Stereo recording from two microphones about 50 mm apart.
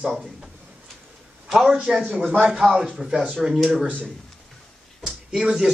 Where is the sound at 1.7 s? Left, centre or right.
Centre.